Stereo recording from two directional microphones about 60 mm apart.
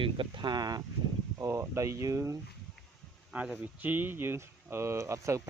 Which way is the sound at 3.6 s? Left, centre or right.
Right.